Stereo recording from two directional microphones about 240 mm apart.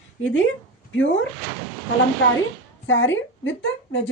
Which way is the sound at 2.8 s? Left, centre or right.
Left.